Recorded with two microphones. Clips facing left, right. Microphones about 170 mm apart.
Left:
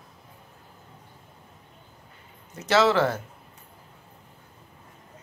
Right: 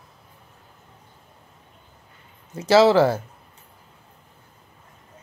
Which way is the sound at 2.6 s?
30° right (ahead or behind).